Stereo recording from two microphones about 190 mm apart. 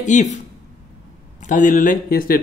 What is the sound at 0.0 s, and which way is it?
Speech, 40° left (ahead or behind).